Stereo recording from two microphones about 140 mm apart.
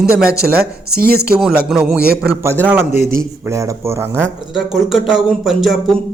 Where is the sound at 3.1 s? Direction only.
20° right (ahead or behind).